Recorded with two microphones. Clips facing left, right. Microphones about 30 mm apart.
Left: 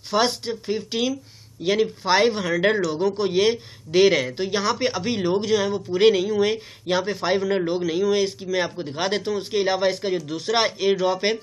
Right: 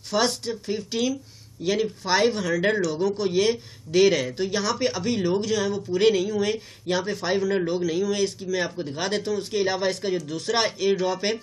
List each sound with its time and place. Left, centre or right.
0.1 s speech: centre